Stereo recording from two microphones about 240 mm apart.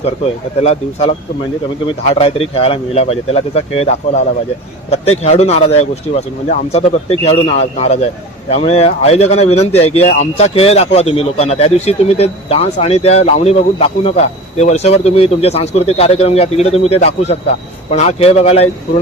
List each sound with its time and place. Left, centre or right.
0.6 s speech: left